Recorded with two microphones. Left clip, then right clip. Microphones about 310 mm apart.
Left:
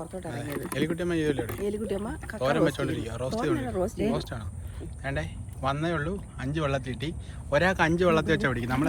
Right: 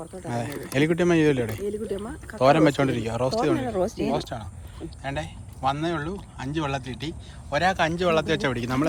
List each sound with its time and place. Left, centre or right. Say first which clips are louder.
0.3 s speech: right 6 dB; right
1.6 s speech: right 1 dB; centre
2.4 s speech: right 7 dB; right
3.7 s speech: right 3 dB; right
4.1 s speech: right 4 dB; centre